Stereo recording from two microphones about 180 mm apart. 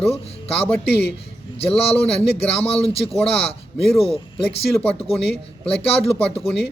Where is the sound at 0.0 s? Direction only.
35° left (ahead or behind).